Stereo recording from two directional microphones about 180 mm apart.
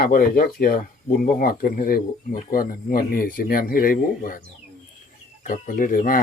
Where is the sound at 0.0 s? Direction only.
50° left (ahead or behind).